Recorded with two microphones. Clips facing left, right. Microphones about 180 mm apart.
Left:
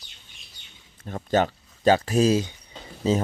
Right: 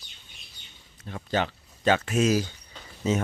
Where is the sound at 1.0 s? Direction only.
45° left (ahead or behind).